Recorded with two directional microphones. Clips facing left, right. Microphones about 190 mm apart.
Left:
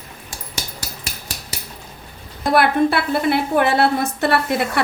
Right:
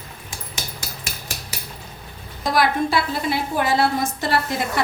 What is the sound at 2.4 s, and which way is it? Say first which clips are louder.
A woman's voice: left 4 dB; 60° left (ahead or behind).